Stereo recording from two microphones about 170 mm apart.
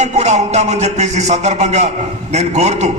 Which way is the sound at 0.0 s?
40° right (ahead or behind).